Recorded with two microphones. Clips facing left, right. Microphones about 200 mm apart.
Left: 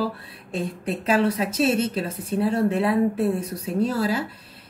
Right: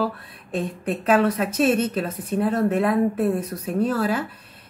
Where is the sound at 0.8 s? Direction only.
30° left (ahead or behind).